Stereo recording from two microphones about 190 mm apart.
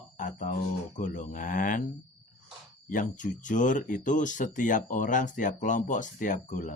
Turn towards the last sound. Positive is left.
turn(degrees=40)  # may be behind; listen again after turning